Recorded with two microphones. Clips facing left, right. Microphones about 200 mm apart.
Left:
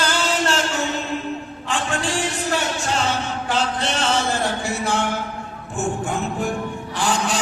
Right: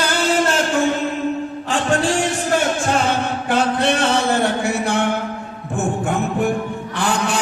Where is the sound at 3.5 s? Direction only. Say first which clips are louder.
Right 6 dB; 55° right (ahead or behind).